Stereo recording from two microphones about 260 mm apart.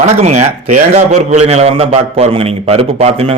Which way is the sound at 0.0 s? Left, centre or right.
Right.